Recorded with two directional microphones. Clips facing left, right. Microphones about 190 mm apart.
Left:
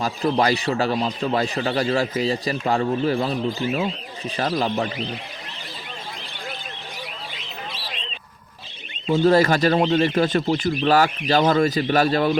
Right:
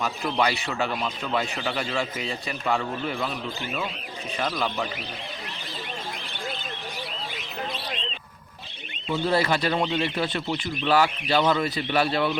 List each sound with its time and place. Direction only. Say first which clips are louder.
0.0 s a man's voice: left 5 dB; 40° left (ahead or behind)
4.4 s a man's voice: left 5 dB; 35° left (ahead or behind)
9.1 s speech: left 7 dB; 45° left (ahead or behind)